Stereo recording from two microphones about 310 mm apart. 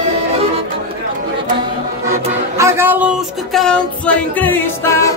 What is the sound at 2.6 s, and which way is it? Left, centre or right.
Speech, centre.